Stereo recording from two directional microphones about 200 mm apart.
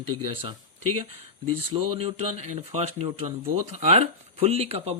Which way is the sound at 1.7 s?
25° right (ahead or behind).